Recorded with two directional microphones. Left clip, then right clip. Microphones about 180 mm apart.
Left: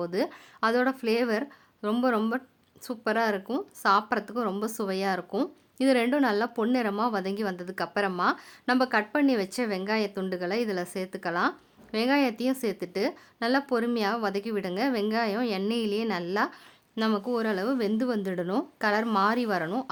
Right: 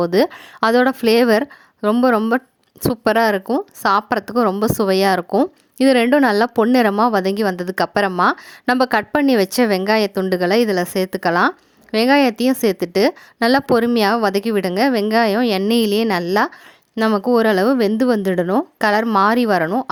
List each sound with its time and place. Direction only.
0.0 s a woman's voice: 45° right (ahead or behind)
16.9 s speech: 30° right (ahead or behind)
17.2 s a woman's voice: 45° right (ahead or behind)